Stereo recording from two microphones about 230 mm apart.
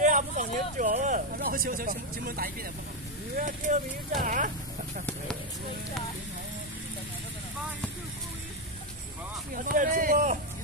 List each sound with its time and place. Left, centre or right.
0.0 s a sound: right
3.3 s speech: right
9.5 s speech: right